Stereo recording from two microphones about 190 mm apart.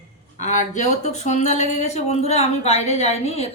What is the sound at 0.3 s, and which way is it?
Speech, 40° left (ahead or behind).